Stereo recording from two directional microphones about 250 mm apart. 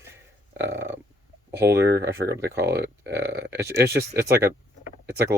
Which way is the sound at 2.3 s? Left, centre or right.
Right.